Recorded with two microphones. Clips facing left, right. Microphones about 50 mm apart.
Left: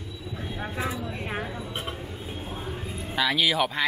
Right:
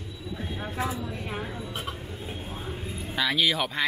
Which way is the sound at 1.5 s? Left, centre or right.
Centre.